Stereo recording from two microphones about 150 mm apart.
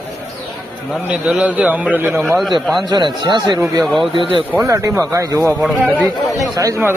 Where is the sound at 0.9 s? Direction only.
5° right (ahead or behind).